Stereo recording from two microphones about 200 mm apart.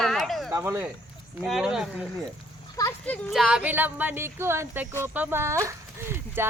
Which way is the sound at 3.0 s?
5° left (ahead or behind).